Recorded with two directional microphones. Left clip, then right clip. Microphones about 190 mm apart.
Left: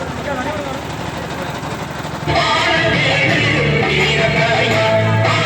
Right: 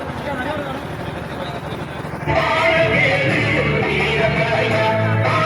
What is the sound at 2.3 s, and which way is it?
Music, 20° left (ahead or behind).